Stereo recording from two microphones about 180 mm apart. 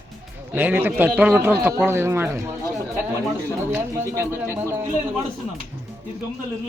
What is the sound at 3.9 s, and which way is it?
Speech, 15° right (ahead or behind).